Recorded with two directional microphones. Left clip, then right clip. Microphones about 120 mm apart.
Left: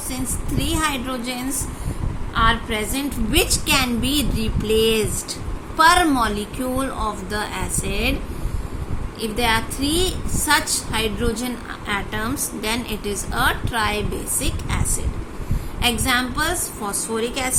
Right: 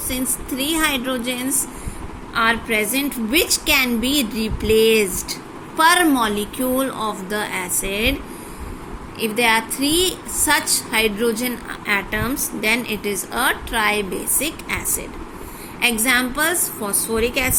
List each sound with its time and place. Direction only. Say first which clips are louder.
0.1 s a woman's voice: right 3 dB; 25° right (ahead or behind)
9.2 s a woman's voice: right 3 dB; 25° right (ahead or behind)
16.0 s a woman's voice: right 3 dB; 30° right (ahead or behind)